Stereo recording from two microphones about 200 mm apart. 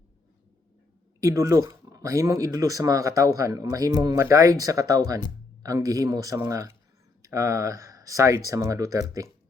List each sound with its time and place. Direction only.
1.2 s speech: 15° right (ahead or behind)